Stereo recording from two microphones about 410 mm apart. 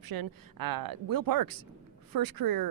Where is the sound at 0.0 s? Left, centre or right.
Right.